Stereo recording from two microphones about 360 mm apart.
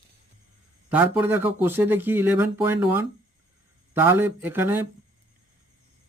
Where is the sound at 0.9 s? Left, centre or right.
Centre.